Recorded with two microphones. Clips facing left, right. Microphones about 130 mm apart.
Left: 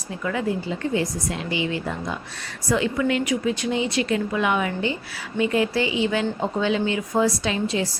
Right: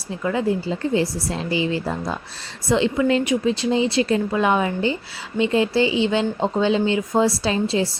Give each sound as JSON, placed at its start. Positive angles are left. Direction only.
{"t": 0.2, "sound": "speech", "side_deg": -30}